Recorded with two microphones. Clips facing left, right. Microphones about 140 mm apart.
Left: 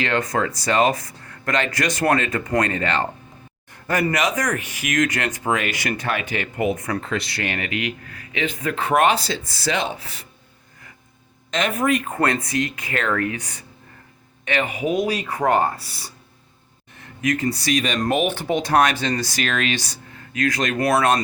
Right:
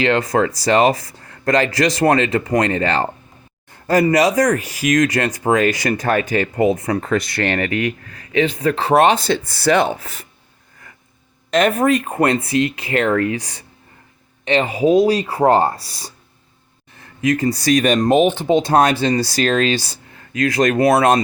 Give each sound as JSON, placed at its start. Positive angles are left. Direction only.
{"t": 0.0, "sound": "speech", "side_deg": -30}
{"t": 7.0, "sound": "speech", "side_deg": -45}
{"t": 7.7, "sound": "speech", "side_deg": 20}
{"t": 8.0, "sound": "speech", "side_deg": -35}
{"t": 9.1, "sound": "speech", "side_deg": -55}
{"t": 10.0, "sound": "speech", "side_deg": -50}
{"t": 11.5, "sound": "speech", "side_deg": -55}
{"t": 11.9, "sound": "speech", "side_deg": -30}
{"t": 18.1, "sound": "speech", "side_deg": -30}